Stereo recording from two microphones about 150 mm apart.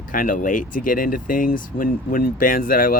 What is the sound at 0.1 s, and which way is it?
Speech, 65° left (ahead or behind).